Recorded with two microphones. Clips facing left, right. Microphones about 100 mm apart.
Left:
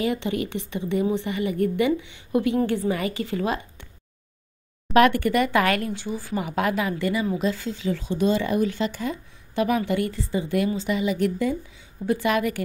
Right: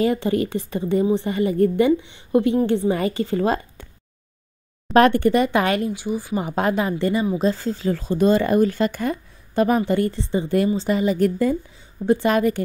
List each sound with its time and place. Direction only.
0.0 s a woman's voice: 35° right (ahead or behind)
4.9 s speech: 30° right (ahead or behind); by 6.4 s 15° right (ahead or behind)
6.4 s a woman's voice: 30° right (ahead or behind); by 9.7 s 50° right (ahead or behind)
9.7 s a woman's voice: 35° right (ahead or behind)